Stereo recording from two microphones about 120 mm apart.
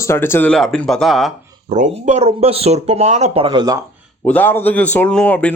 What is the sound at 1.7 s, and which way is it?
Speech, 75° right (ahead or behind).